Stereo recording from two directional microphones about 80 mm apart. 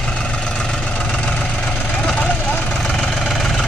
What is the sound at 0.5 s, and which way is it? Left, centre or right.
Vehicle, centre.